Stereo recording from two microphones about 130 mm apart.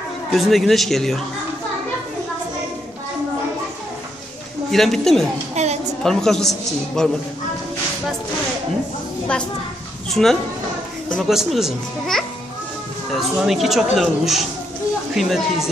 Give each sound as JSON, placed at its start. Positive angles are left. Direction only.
{"t": 0.3, "sound": "speech", "side_deg": 0}
{"t": 4.6, "sound": "speech", "side_deg": 0}
{"t": 5.5, "sound": "a sound", "side_deg": -60}
{"t": 6.0, "sound": "speech", "side_deg": 5}
{"t": 10.2, "sound": "speech", "side_deg": 0}